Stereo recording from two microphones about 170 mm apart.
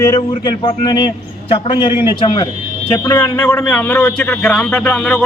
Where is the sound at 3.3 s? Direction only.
5° left (ahead or behind).